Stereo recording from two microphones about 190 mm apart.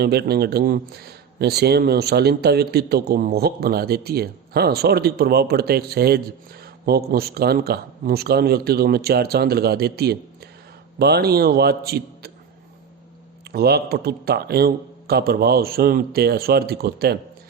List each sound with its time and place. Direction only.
0.0 s speech: 60° right (ahead or behind)
13.5 s speech: 55° right (ahead or behind)